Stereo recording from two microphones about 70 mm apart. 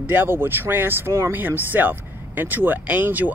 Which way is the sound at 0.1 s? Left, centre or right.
Right.